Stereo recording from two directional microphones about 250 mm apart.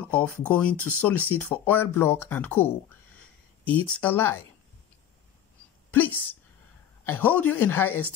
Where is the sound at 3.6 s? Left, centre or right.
Centre.